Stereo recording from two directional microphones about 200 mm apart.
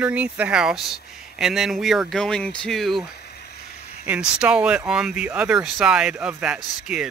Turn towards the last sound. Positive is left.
turn(degrees=-5)  # may be behind; listen again after turning